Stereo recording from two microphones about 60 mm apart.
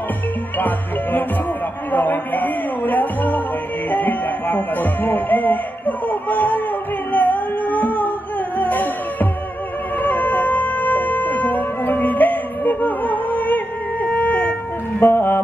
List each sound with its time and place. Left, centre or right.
0.6 s speech: left
7.1 s music: left
14.0 s wind instrument: left
15.0 s music: left